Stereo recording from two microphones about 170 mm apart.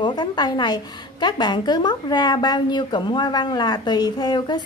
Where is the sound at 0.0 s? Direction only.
25° left (ahead or behind).